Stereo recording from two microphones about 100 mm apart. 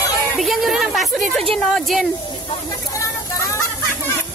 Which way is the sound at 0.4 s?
Centre (ahead or behind).